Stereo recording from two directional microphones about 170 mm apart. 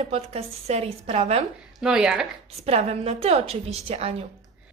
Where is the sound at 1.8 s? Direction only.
5° right (ahead or behind).